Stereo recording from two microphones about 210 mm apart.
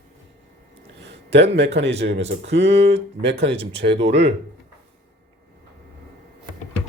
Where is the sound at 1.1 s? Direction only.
55° right (ahead or behind).